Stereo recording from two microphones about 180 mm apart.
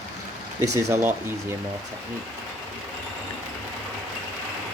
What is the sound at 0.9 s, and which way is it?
Speech, 10° right (ahead or behind).